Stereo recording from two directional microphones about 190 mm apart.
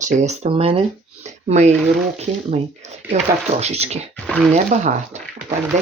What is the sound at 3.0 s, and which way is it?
Speech, 10° right (ahead or behind).